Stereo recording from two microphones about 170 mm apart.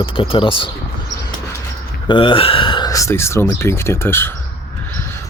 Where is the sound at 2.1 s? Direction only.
30° left (ahead or behind); by 4.3 s 15° left (ahead or behind).